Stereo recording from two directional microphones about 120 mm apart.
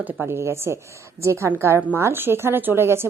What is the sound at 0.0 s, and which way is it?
A woman's voice, 15° right (ahead or behind).